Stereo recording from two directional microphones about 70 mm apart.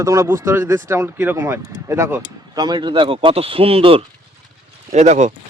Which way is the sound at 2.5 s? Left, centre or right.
Right.